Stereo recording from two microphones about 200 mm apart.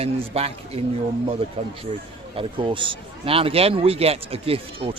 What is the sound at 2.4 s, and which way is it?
A man's voice, 25° right (ahead or behind).